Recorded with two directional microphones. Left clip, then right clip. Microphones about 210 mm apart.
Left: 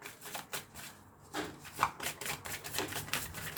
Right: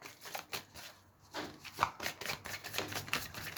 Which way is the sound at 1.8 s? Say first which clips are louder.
Left 1 dB; 35° right (ahead or behind).